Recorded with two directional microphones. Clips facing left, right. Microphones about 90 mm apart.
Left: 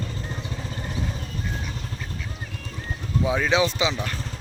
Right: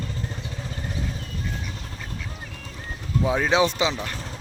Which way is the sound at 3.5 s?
45° right (ahead or behind).